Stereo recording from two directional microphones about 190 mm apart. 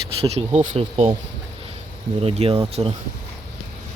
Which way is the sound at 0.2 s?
30° right (ahead or behind).